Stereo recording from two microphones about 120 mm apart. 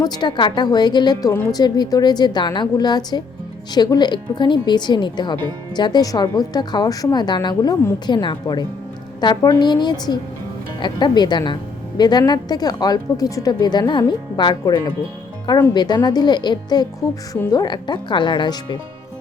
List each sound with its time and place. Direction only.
0.0 s speech: 35° left (ahead or behind)